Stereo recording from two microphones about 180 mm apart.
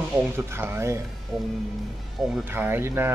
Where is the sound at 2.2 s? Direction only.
Centre (ahead or behind).